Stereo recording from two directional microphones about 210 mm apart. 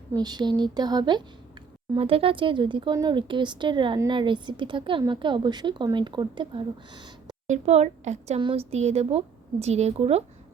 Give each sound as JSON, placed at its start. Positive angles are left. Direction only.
{"t": 0.1, "sound": "speech", "side_deg": -20}
{"t": 7.4, "sound": "speech", "side_deg": -30}